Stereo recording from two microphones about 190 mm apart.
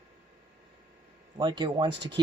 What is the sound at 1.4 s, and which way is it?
Speech, 25° right (ahead or behind).